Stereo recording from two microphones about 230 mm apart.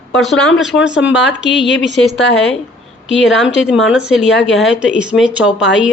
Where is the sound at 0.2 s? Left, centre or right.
Centre.